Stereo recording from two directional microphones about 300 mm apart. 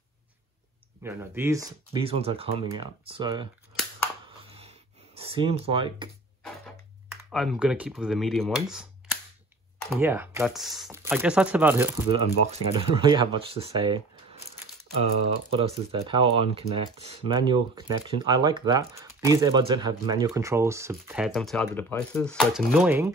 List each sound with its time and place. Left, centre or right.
1.0 s speech: centre
4.5 s a sound: centre
7.2 s speech: centre